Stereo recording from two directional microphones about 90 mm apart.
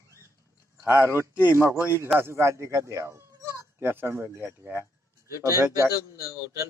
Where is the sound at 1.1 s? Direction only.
30° right (ahead or behind).